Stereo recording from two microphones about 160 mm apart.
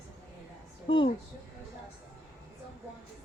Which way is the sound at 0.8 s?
35° left (ahead or behind).